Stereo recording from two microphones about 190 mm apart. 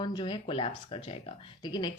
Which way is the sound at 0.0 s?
25° left (ahead or behind).